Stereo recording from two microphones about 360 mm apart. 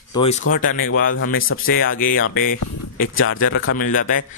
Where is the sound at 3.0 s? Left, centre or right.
Left.